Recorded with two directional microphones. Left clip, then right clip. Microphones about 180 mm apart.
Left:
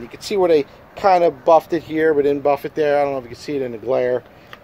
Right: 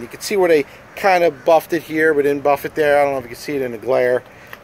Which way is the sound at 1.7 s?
65° left (ahead or behind).